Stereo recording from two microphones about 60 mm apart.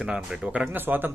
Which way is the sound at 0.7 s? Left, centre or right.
Right.